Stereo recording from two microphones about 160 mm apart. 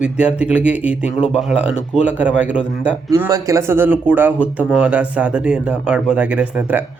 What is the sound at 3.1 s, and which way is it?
Speech, 20° right (ahead or behind).